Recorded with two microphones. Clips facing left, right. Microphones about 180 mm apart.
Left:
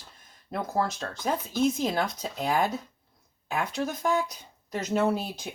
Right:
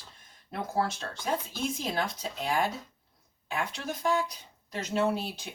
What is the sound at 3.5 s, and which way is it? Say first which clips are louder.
Speech: left 4 dB; 50° left (ahead or behind).